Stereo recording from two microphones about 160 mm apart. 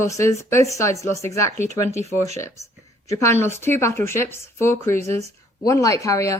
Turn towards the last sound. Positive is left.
turn(degrees=20)  # may be behind; listen again after turning